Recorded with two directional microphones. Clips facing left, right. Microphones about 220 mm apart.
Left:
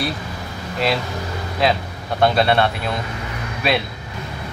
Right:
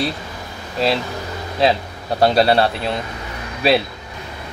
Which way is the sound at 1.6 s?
30° right (ahead or behind).